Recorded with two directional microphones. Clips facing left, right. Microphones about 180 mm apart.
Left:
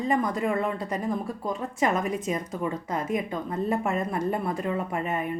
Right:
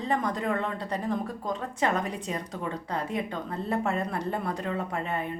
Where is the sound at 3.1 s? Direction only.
15° left (ahead or behind).